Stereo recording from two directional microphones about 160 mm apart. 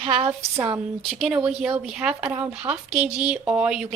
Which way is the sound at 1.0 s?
Centre (ahead or behind).